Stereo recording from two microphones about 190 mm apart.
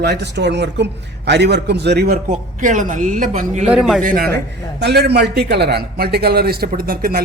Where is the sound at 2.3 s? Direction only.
40° right (ahead or behind).